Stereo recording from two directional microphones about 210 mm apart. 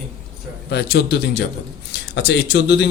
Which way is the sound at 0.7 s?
50° left (ahead or behind).